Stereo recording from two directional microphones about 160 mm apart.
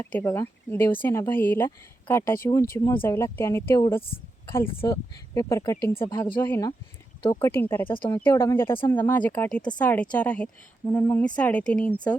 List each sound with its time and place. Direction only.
0.2 s speech: 15° left (ahead or behind)